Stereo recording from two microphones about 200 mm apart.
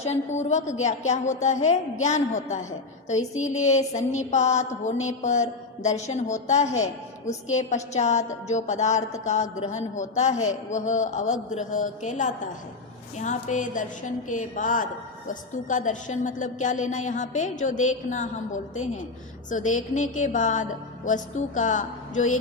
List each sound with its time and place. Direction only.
0.0 s a woman's voice: 35° left (ahead or behind)